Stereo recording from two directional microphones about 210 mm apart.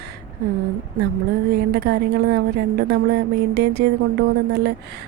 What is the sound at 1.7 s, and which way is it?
Speech, 50° right (ahead or behind).